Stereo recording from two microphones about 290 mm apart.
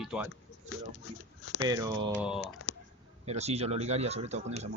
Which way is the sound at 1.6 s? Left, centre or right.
Centre.